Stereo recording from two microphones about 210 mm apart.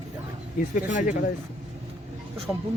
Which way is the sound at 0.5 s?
40° left (ahead or behind).